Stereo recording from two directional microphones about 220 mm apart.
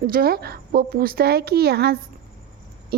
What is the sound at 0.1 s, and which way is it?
A woman's voice, 45° right (ahead or behind).